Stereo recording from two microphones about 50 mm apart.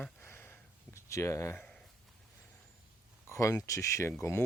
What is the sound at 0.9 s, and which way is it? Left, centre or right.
Speech, left.